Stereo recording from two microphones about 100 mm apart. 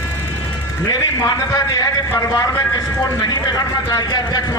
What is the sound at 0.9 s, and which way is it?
A man's voice, 35° left (ahead or behind).